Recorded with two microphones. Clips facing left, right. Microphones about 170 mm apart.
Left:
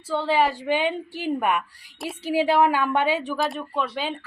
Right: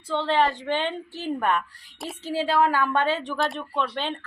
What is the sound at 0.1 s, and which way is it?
Speech, 5° left (ahead or behind).